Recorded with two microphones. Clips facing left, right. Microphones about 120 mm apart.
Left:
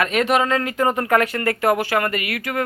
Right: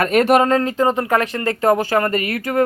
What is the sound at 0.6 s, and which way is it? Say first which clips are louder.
Speech: right 3 dB; 25° right (ahead or behind).